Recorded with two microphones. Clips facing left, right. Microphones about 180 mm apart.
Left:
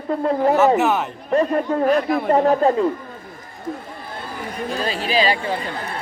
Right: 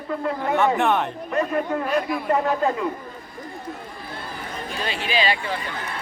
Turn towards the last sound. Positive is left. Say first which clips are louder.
# left 4 dB
turn(degrees=35)  # may be behind; listen again after turning